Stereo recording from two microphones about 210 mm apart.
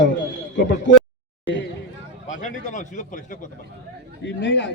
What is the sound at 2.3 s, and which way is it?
Speech, 35° left (ahead or behind).